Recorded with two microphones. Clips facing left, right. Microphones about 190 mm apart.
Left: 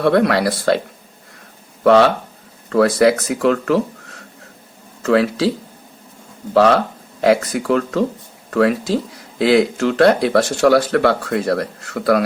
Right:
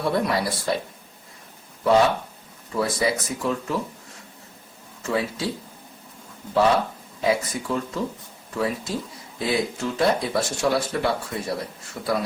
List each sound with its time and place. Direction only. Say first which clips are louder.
0.0 s speech: left 9 dB; 80° left
1.8 s speech: left 6 dB; 85° left
6.5 s speech: left 6 dB; 80° left